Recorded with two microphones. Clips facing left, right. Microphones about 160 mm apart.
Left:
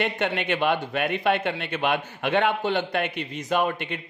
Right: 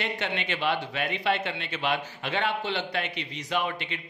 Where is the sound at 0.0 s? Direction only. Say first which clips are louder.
Left 6 dB; 55° left (ahead or behind).